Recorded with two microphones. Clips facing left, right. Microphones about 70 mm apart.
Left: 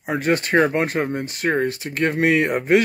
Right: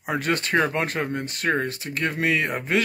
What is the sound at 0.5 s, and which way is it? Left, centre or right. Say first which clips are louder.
Speech: left 4 dB; left.